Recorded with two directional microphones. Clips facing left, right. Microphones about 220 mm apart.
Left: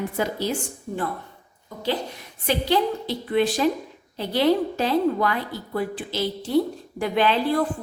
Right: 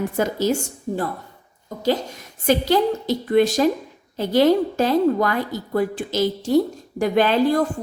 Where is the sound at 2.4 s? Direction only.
45° right (ahead or behind).